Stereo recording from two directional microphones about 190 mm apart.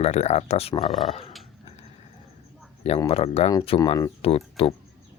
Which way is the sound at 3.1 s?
35° left (ahead or behind).